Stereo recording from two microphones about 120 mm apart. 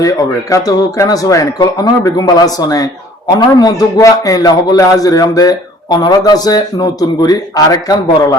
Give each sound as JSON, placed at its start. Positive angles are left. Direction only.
{"t": 0.0, "sound": "a man's voice", "side_deg": 30}